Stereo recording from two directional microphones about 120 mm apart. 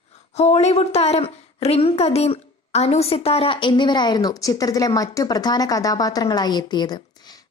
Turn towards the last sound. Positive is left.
turn(degrees=35)  # may be behind; listen again after turning